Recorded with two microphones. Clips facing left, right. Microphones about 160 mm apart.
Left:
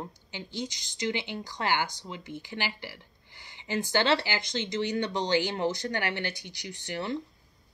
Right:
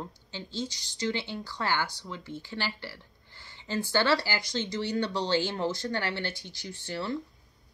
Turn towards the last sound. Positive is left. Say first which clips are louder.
# even
turn(degrees=15)  # may be behind; listen again after turning